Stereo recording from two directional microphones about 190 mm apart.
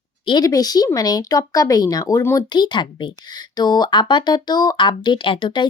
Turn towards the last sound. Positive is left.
turn(degrees=25)  # may be behind; listen again after turning